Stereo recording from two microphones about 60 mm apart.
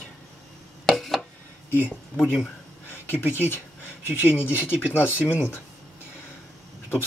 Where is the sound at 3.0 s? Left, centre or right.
Left.